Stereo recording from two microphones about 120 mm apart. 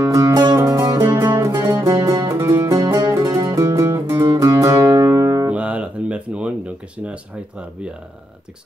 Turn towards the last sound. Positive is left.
turn(degrees=-10)  # may be behind; listen again after turning